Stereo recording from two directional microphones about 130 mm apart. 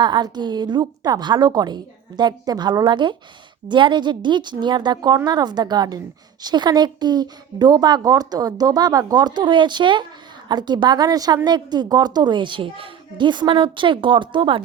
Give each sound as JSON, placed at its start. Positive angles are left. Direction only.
{"t": 0.0, "sound": "speech", "side_deg": -35}